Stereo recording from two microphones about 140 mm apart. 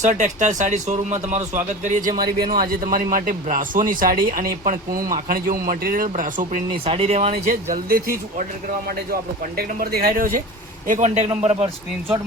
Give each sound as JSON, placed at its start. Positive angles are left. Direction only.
{"t": 0.0, "sound": "speech", "side_deg": -60}
{"t": 1.8, "sound": "speech", "side_deg": -70}
{"t": 2.5, "sound": "speech", "side_deg": -90}
{"t": 6.8, "sound": "speech", "side_deg": -45}
{"t": 7.4, "sound": "speech", "side_deg": -90}
{"t": 9.6, "sound": "speech", "side_deg": -90}
{"t": 10.8, "sound": "speech", "side_deg": -60}